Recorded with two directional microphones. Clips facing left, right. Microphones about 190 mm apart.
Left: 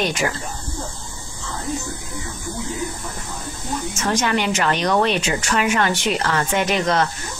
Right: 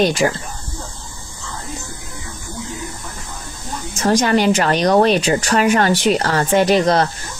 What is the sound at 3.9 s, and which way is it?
Speech, 35° right (ahead or behind).